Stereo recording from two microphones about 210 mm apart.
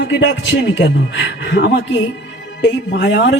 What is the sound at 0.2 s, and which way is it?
Speech, 60° left (ahead or behind).